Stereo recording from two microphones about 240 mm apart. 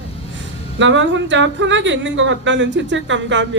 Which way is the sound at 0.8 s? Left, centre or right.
Right.